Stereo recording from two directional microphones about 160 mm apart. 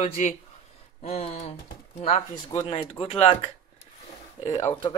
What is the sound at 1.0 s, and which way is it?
Speech, 40° left (ahead or behind).